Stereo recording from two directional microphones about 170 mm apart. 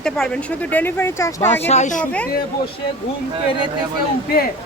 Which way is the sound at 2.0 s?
10° left (ahead or behind).